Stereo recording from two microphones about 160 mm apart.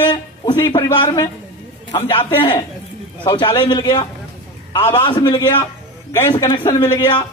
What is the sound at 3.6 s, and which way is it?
A man's voice, 30° left (ahead or behind).